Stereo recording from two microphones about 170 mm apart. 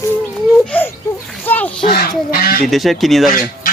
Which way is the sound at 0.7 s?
10° left (ahead or behind).